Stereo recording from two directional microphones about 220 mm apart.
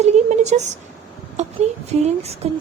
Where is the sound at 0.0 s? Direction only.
30° right (ahead or behind).